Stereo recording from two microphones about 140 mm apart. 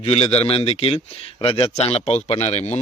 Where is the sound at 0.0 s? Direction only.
45° left (ahead or behind).